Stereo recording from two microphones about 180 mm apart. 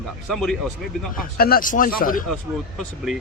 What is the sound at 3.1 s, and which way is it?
Speech, centre (ahead or behind).